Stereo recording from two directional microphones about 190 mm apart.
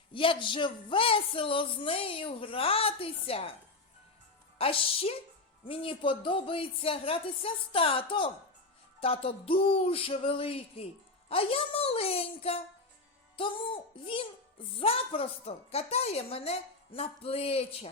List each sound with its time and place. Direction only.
0.1 s a woman's voice: 25° left (ahead or behind)
4.5 s a woman's voice: 30° left (ahead or behind)